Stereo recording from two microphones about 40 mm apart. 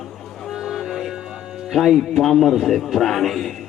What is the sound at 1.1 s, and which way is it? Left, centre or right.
Music, centre.